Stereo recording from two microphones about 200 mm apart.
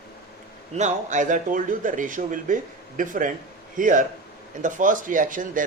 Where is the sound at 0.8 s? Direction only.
35° right (ahead or behind).